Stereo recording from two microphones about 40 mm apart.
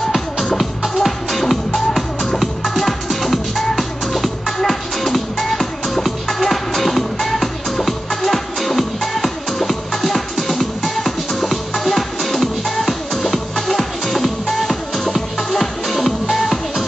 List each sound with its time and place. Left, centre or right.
0.6 s music: centre